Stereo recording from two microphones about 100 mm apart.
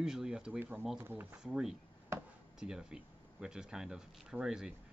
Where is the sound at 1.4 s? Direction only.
5° right (ahead or behind).